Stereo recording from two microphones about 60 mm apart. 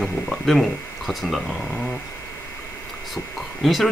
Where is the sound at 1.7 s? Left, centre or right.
Centre.